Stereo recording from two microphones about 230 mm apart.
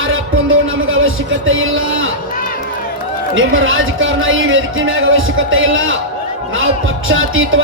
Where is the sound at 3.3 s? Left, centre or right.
Right.